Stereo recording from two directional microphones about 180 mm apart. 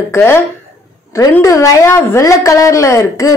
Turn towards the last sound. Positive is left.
turn(degrees=20)  # may be behind; listen again after turning